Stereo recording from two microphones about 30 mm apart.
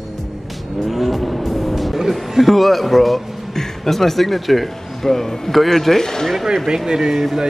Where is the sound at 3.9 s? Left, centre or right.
Centre.